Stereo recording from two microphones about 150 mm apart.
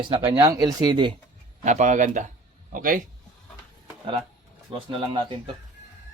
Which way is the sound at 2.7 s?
70° right (ahead or behind).